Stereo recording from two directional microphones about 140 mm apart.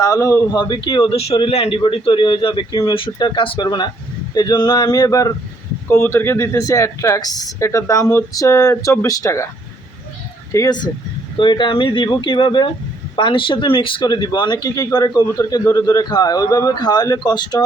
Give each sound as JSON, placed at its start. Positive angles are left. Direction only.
{"t": 0.0, "sound": "speech", "side_deg": 25}
{"t": 0.6, "sound": "a man's voice", "side_deg": 35}
{"t": 1.1, "sound": "a man's voice", "side_deg": 45}
{"t": 10.5, "sound": "a man's voice", "side_deg": 25}